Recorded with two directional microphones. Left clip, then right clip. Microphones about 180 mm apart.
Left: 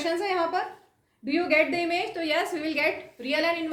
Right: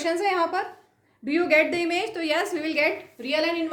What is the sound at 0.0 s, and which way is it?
A woman's voice, 35° right (ahead or behind).